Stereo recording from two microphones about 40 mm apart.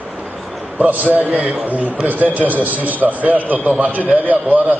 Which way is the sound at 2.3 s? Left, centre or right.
Right.